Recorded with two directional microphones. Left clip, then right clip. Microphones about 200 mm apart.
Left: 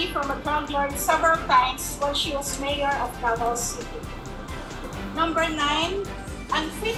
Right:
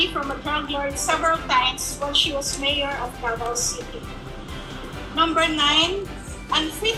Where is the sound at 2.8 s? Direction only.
30° right (ahead or behind).